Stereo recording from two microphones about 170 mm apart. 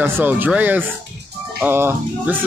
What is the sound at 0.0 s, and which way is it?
Speech, 10° right (ahead or behind).